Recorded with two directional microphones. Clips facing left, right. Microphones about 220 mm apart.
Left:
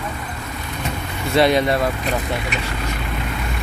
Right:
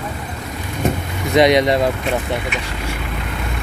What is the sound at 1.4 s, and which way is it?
Speech, 15° right (ahead or behind).